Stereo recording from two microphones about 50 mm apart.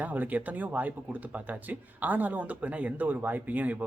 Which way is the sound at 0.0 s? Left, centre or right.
Right.